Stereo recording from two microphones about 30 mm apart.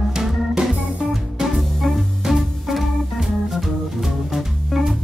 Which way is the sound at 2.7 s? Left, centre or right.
Centre.